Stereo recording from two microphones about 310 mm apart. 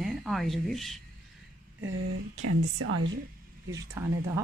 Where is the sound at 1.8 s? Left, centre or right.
Right.